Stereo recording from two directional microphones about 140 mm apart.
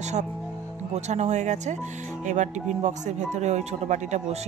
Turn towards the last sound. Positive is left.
turn(degrees=-55)  # may be behind; listen again after turning